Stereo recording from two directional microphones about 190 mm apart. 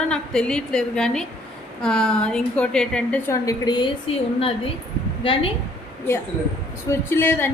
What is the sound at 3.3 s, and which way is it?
A woman's voice, 20° left (ahead or behind).